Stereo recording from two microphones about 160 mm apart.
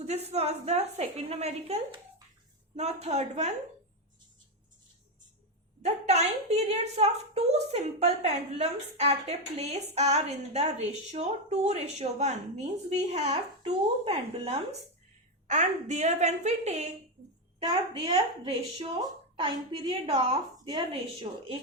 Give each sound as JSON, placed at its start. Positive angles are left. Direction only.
{"t": 0.0, "sound": "a woman's voice", "side_deg": -40}
{"t": 5.8, "sound": "a woman's voice", "side_deg": -45}
{"t": 17.7, "sound": "a woman's voice", "side_deg": -35}
{"t": 21.3, "sound": "a woman's voice", "side_deg": -40}